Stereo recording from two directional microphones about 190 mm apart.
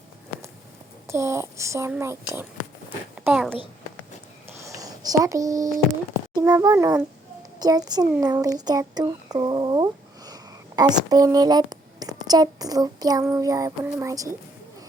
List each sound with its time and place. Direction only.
1.0 s a child's voice: 15° right (ahead or behind)
4.6 s a sound: 20° right (ahead or behind)
6.3 s a child's voice: 20° right (ahead or behind)